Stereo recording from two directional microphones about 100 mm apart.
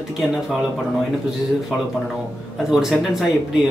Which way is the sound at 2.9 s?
Centre (ahead or behind).